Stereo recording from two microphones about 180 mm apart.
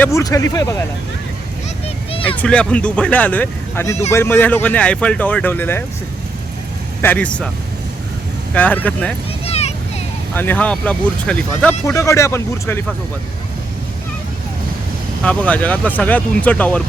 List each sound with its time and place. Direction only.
0.0 s speech: 15° left (ahead or behind)
2.4 s speech: 5° left (ahead or behind)
7.0 s speech: 10° left (ahead or behind)
8.5 s speech: 10° left (ahead or behind)
9.5 s a sound: 35° left (ahead or behind)
10.3 s speech: 10° left (ahead or behind)
15.2 s speech: 5° left (ahead or behind)